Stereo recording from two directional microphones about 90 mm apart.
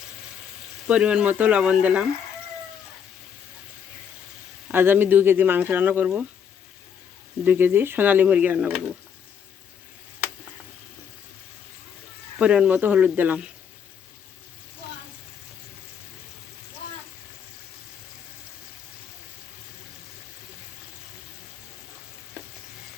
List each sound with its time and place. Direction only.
0.9 s speech: 10° right (ahead or behind)
4.7 s speech: 25° right (ahead or behind)
7.4 s speech: 20° right (ahead or behind)
12.4 s speech: 10° right (ahead or behind)